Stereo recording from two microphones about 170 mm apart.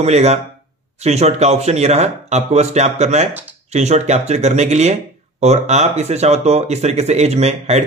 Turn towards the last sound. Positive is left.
turn(degrees=-40)  # may be behind; listen again after turning